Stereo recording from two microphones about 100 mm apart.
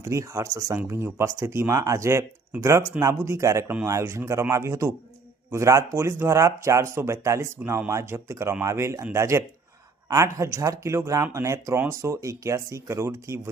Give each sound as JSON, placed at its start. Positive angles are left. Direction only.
{"t": 0.0, "sound": "speech", "side_deg": -30}